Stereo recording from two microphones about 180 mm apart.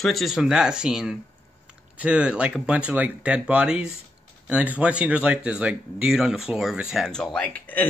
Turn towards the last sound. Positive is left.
turn(degrees=10)  # may be behind; listen again after turning